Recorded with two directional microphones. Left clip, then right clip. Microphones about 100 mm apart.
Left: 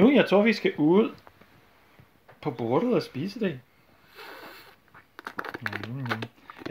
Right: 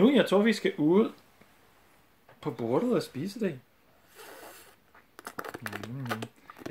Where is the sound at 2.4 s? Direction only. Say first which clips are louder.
Left 3 dB; 35° left (ahead or behind).